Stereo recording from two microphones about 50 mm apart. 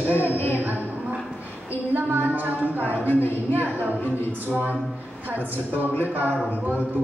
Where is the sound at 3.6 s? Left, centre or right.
Right.